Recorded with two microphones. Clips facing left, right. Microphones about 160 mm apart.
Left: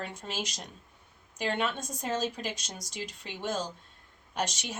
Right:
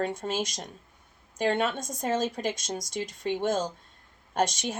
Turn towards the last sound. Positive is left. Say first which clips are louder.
# right 7 dB
turn(degrees=-50)  # may be behind; listen again after turning